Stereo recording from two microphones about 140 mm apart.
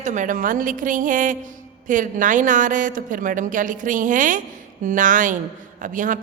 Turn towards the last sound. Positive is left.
turn(degrees=-70)  # may be behind; listen again after turning